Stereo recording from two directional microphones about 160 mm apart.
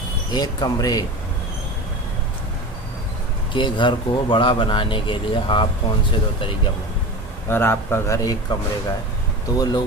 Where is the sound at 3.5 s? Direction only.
30° left (ahead or behind).